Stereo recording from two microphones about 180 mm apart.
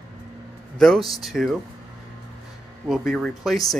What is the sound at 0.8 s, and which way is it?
Speech, centre (ahead or behind).